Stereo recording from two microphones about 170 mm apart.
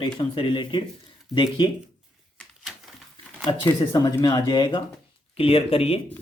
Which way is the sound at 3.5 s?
20° left (ahead or behind).